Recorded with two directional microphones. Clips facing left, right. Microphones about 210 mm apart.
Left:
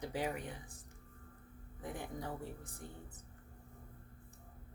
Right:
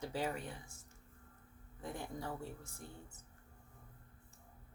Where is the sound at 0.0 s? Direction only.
15° left (ahead or behind).